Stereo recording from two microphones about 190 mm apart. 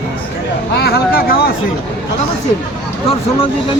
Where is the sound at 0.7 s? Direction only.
55° left (ahead or behind).